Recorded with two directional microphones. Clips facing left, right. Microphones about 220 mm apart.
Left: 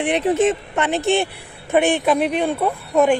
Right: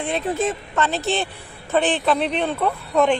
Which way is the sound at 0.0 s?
20° left (ahead or behind).